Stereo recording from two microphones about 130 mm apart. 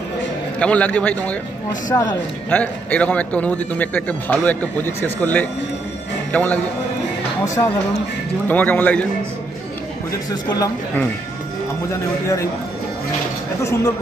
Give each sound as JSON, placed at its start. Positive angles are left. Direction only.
{"t": 0.6, "sound": "a man's voice", "side_deg": 10}
{"t": 1.9, "sound": "a man's voice", "side_deg": 30}
{"t": 2.5, "sound": "a man's voice", "side_deg": 10}
{"t": 7.4, "sound": "a man's voice", "side_deg": 25}
{"t": 8.5, "sound": "a man's voice", "side_deg": 15}
{"t": 11.9, "sound": "a man's voice", "side_deg": 25}
{"t": 13.6, "sound": "a man's voice", "side_deg": 25}